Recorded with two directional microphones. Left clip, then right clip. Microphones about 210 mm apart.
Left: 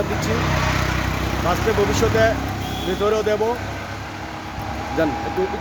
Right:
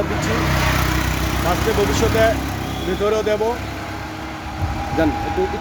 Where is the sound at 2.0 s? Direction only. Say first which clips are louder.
Right 1 dB; 10° left (ahead or behind).